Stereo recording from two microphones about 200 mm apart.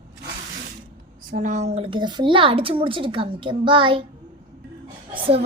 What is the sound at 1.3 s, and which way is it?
A woman's voice, 40° right (ahead or behind).